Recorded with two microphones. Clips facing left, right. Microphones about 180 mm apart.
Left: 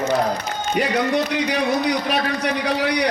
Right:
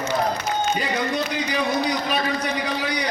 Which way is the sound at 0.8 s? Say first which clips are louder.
Left 5 dB; 70° left (ahead or behind).